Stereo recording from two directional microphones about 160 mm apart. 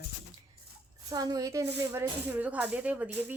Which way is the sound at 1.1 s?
25° right (ahead or behind).